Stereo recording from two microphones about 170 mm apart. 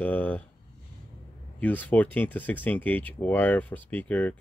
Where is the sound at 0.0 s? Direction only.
10° left (ahead or behind).